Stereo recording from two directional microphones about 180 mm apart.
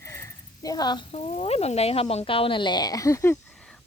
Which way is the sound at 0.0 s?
15° left (ahead or behind).